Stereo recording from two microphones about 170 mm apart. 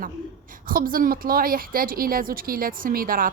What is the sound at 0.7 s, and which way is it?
A woman's voice, 55° right (ahead or behind).